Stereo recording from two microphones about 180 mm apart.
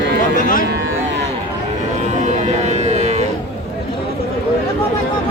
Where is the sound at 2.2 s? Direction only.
40° right (ahead or behind).